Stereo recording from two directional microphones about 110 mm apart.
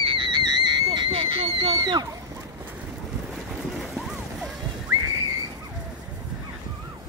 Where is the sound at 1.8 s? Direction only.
35° right (ahead or behind).